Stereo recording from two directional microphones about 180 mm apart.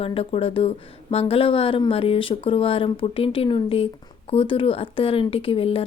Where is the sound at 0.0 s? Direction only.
30° left (ahead or behind).